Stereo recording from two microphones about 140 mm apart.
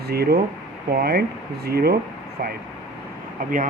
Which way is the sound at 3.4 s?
75° right (ahead or behind).